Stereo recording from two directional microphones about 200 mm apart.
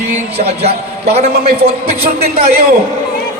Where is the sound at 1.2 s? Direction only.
50° right (ahead or behind).